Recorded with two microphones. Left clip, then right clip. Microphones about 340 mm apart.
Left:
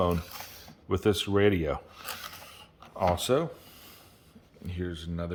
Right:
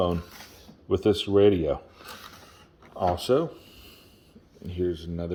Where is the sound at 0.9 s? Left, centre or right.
Centre.